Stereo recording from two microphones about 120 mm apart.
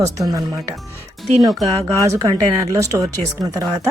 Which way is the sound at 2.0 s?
30° right (ahead or behind).